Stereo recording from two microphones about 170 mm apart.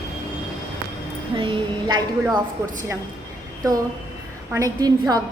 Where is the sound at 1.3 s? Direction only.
30° right (ahead or behind).